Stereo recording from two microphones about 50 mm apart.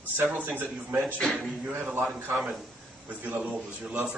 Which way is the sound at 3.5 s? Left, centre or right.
Centre.